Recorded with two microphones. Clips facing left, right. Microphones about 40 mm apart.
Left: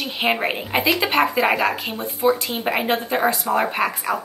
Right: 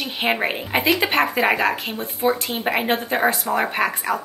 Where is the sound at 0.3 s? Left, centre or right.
Centre.